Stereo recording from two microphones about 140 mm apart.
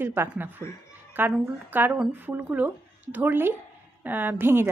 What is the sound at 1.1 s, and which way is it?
Music, 15° right (ahead or behind).